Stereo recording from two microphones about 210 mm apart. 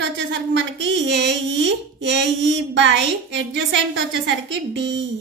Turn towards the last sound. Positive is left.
turn(degrees=-60)  # may be behind; listen again after turning